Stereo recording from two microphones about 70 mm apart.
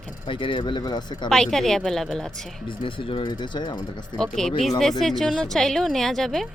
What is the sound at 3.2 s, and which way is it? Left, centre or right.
Speech, left.